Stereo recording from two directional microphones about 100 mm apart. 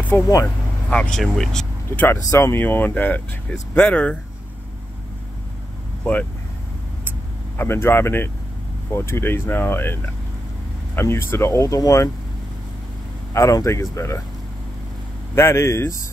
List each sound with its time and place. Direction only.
0.1 s speech: 30° left (ahead or behind)
0.8 s speech: 10° left (ahead or behind)
2.0 s speech: 25° left (ahead or behind)
7.5 s speech: 25° left (ahead or behind)
11.0 s speech: 25° left (ahead or behind)
13.3 s speech: 30° left (ahead or behind)
15.3 s speech: 25° left (ahead or behind)